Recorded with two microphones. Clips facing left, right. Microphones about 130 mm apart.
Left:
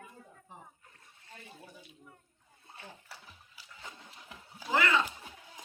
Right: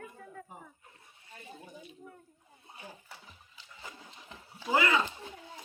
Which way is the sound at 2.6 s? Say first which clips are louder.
Right 2 dB; 15° right (ahead or behind).